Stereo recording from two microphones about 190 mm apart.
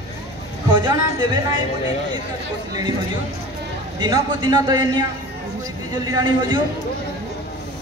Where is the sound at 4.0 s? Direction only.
20° right (ahead or behind).